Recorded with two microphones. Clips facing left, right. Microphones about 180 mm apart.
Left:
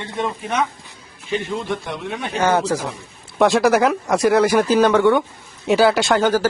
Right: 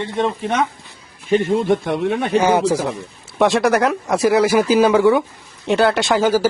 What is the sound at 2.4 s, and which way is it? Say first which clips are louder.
Speech: even; 10° right (ahead or behind).